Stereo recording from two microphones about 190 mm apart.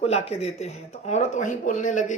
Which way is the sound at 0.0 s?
35° left (ahead or behind).